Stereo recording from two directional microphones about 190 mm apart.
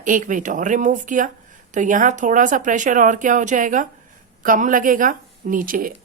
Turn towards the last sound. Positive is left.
turn(degrees=-45)  # may be behind; listen again after turning